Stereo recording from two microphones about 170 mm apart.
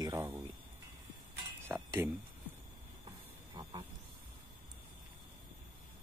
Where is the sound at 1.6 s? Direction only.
10° right (ahead or behind).